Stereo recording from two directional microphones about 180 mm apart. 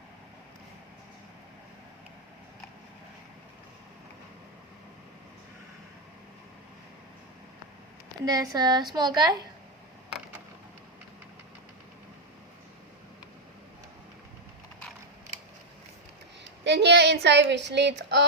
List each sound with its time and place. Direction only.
8.2 s a woman's voice: 20° right (ahead or behind)
16.6 s a woman's voice: 70° right (ahead or behind)